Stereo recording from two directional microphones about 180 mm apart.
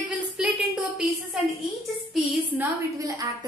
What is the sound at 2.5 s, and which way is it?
Speech, 20° right (ahead or behind).